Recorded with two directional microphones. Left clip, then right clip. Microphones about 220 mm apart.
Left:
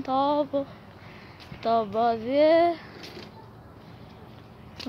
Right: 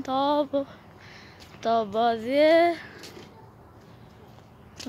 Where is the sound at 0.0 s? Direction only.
15° right (ahead or behind).